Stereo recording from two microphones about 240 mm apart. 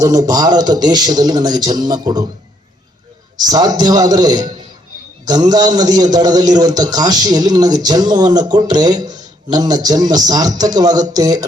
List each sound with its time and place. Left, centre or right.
0.0 s a man's voice: centre
3.3 s a man's voice: centre